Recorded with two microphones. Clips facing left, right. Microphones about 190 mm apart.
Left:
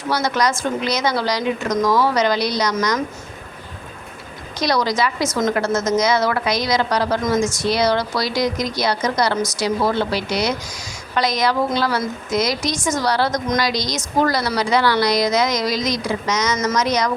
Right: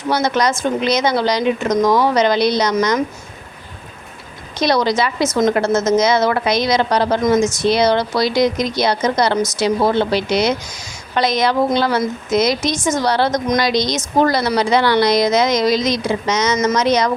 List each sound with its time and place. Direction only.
0.1 s a woman's voice: 25° right (ahead or behind)
4.6 s a woman's voice: 25° right (ahead or behind)